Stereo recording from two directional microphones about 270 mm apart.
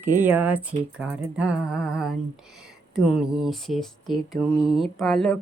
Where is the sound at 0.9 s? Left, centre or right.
Centre.